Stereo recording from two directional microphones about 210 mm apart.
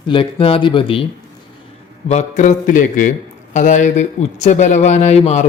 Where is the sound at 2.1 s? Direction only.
35° left (ahead or behind).